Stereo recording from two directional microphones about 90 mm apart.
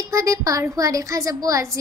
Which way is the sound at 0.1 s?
35° right (ahead or behind).